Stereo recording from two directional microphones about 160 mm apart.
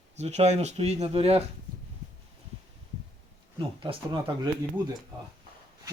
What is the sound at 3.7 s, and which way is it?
Speech, 30° right (ahead or behind).